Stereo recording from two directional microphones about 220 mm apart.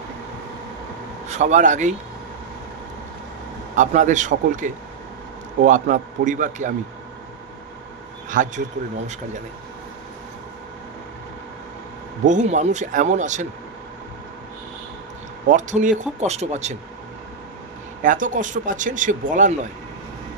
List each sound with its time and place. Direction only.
1.2 s speech: 30° right (ahead or behind)
3.7 s speech: 35° right (ahead or behind)
8.3 s speech: 35° right (ahead or behind)
12.3 s speech: 35° right (ahead or behind)
15.4 s speech: 35° right (ahead or behind)
18.0 s speech: 35° right (ahead or behind)